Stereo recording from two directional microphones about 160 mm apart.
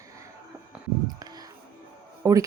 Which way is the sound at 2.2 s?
20° right (ahead or behind).